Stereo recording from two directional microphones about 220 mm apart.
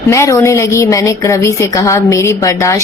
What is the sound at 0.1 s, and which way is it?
A woman's voice, 15° left (ahead or behind).